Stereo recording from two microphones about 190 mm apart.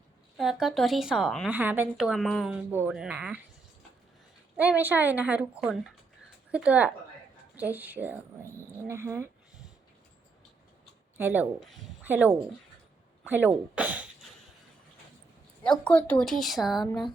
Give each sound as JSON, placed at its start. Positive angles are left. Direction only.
{"t": 0.3, "sound": "speech", "side_deg": 0}
{"t": 4.5, "sound": "a child's voice", "side_deg": -10}
{"t": 11.2, "sound": "a child's voice", "side_deg": -10}
{"t": 11.6, "sound": "speech", "side_deg": 0}
{"t": 12.0, "sound": "speech", "side_deg": -10}
{"t": 15.8, "sound": "speech", "side_deg": 5}